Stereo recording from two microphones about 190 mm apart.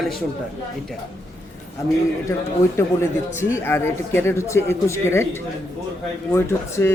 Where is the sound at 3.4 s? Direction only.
15° left (ahead or behind).